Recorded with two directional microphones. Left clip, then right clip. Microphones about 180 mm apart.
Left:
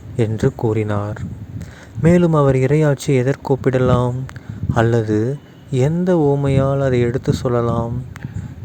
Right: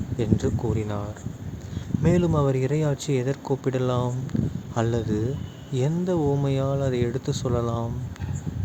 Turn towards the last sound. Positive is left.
turn(degrees=40)  # may be behind; listen again after turning